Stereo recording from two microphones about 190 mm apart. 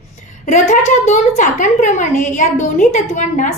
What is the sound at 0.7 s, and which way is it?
A woman's voice, 40° left (ahead or behind).